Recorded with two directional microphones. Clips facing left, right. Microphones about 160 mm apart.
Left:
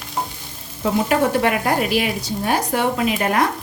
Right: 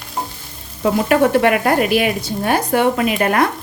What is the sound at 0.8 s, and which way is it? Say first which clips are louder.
Speech: right 4 dB; 65° right (ahead or behind).